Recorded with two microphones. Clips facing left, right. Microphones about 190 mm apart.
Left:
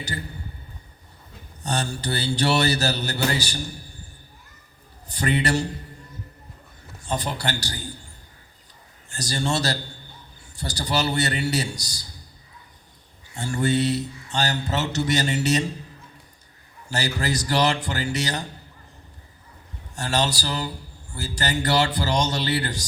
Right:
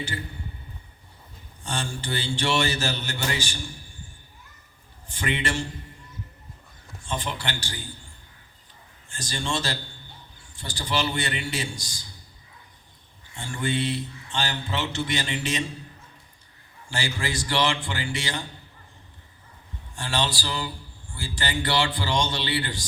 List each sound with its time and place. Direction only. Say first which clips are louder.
1.6 s speech: left 4 dB; 40° left (ahead or behind)
5.0 s speech: left 5 dB; 40° left (ahead or behind)
7.0 s speech: left 4 dB; 40° left (ahead or behind)
9.0 s speech: left 5 dB; 40° left (ahead or behind)
13.3 s speech: left 5 dB; 40° left (ahead or behind)
16.9 s speech: left 4 dB; 40° left (ahead or behind)
20.0 s speech: left 3 dB; 40° left (ahead or behind)